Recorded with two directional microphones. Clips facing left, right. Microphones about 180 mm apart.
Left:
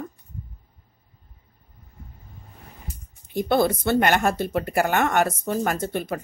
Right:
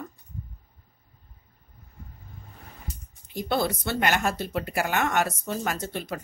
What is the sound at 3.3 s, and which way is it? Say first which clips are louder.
Speech: left 6 dB; 55° left (ahead or behind).